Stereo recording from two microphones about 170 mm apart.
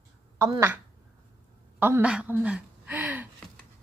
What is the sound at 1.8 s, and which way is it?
A woman's voice, 10° right (ahead or behind).